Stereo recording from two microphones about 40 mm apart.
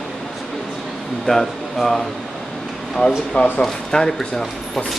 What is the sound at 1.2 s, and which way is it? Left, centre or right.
Speech, centre.